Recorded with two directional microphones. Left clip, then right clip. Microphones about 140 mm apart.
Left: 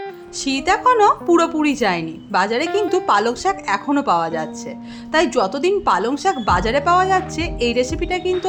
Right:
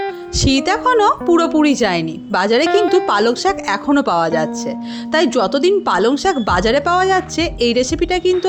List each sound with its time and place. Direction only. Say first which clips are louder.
0.3 s a woman's voice: right 2 dB; 40° right (ahead or behind)